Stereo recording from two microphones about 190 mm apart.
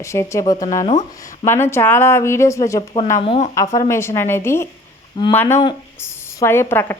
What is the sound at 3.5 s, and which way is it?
A woman's voice, 15° left (ahead or behind).